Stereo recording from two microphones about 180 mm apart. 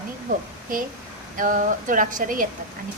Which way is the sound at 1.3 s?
50° right (ahead or behind).